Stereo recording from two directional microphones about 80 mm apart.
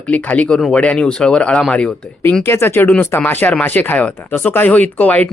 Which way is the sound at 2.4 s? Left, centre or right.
Left.